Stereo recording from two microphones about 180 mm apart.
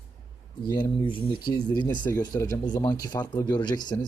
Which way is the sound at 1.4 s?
25° left (ahead or behind).